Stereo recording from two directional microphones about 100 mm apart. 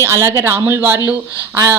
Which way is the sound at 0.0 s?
25° right (ahead or behind).